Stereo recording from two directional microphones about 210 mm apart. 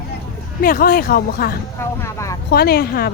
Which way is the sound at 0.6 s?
45° left (ahead or behind).